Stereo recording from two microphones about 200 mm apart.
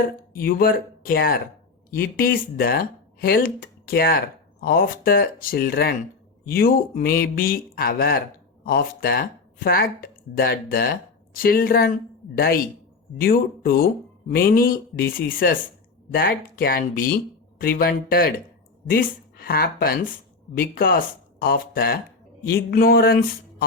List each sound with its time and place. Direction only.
0.3 s speech: 45° left (ahead or behind)